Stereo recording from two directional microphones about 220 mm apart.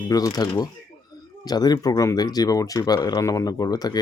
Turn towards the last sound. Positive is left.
turn(degrees=20)  # may be behind; listen again after turning